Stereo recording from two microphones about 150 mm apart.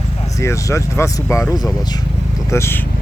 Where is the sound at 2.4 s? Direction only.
15° left (ahead or behind).